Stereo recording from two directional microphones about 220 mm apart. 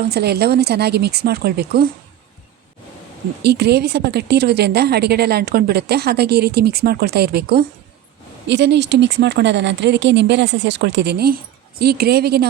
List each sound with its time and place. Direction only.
0.0 s a woman's voice: 45° right (ahead or behind)
3.4 s a woman's voice: 50° right (ahead or behind)